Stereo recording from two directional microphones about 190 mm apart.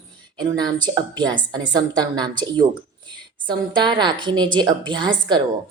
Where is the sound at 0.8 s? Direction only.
20° right (ahead or behind).